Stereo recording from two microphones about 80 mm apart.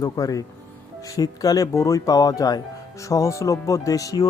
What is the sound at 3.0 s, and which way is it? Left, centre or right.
Speech, left.